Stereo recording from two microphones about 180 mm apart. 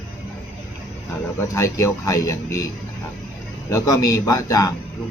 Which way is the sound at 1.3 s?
15° left (ahead or behind).